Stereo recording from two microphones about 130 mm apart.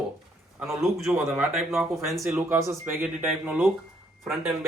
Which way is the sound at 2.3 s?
20° right (ahead or behind).